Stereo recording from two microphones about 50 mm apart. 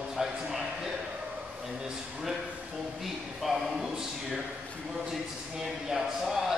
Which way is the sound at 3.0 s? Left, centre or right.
Centre.